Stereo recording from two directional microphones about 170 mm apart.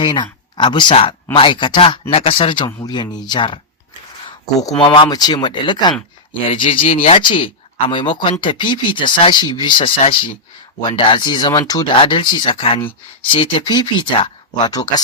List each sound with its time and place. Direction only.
0.0 s speech: 25° left (ahead or behind)
4.7 s speech: 30° left (ahead or behind)